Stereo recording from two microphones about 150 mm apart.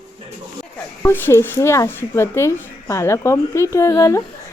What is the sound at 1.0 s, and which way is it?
Speech, 15° left (ahead or behind).